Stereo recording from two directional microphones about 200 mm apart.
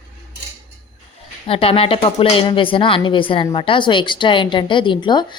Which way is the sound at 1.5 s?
30° left (ahead or behind).